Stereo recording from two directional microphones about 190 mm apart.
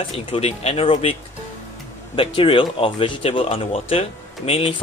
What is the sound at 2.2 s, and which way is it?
Speech, 25° left (ahead or behind).